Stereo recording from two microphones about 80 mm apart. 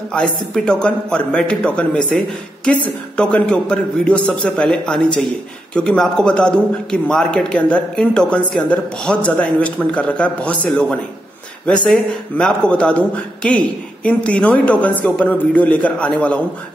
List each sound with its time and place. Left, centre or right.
0.1 s a man's voice: centre